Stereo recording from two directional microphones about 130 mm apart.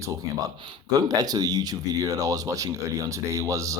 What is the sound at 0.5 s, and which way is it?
Speech, 40° right (ahead or behind).